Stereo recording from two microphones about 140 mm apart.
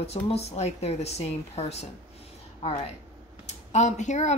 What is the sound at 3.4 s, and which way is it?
Speech, 55° left (ahead or behind).